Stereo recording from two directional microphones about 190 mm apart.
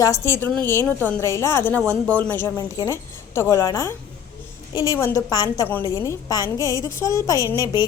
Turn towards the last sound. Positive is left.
turn(degrees=20)  # may be behind; listen again after turning